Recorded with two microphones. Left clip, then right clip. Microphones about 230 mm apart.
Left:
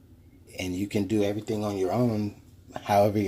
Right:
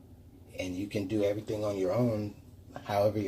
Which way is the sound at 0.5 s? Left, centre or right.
Left.